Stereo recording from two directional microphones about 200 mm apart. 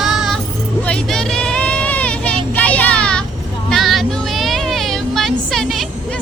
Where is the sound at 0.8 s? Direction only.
5° left (ahead or behind).